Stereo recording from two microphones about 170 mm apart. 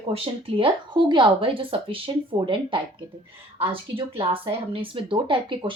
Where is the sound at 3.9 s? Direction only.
35° right (ahead or behind).